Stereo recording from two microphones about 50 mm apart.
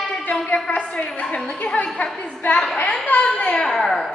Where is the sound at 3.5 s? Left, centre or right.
Centre.